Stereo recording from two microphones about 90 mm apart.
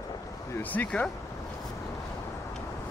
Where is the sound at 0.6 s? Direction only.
20° left (ahead or behind).